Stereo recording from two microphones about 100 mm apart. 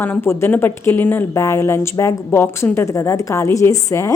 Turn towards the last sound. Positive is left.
turn(degrees=30)  # may be behind; listen again after turning